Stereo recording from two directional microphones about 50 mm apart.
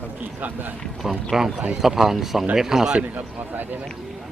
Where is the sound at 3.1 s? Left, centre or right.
Right.